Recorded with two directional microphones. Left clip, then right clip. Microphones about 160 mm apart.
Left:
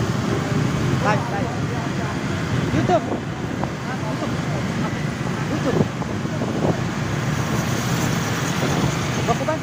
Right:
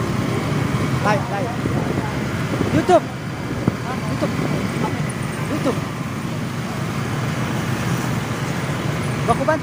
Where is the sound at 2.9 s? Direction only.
40° right (ahead or behind).